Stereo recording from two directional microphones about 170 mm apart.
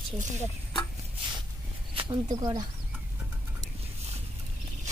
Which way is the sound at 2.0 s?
30° right (ahead or behind).